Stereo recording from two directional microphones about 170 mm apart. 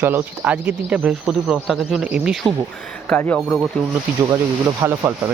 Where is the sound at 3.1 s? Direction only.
10° left (ahead or behind).